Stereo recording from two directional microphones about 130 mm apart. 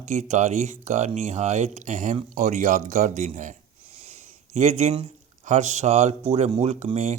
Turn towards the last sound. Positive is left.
turn(degrees=-55)  # may be behind; listen again after turning